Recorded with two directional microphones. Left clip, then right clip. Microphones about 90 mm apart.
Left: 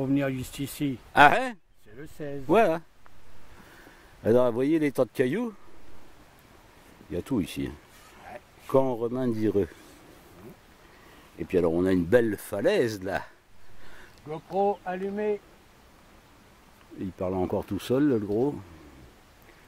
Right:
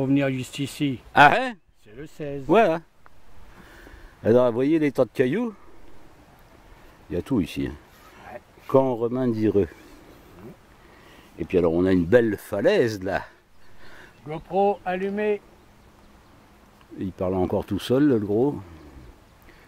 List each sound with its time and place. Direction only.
0.0 s speech: centre (ahead or behind)
2.0 s speech: centre (ahead or behind)
4.2 s speech: 10° left (ahead or behind)
7.1 s speech: centre (ahead or behind)
11.3 s speech: 10° left (ahead or behind)
14.2 s speech: 30° right (ahead or behind)
17.0 s speech: centre (ahead or behind)